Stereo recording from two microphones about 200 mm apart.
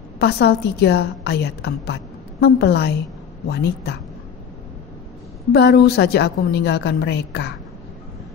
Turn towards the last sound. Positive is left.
turn(degrees=55)  # may be behind; listen again after turning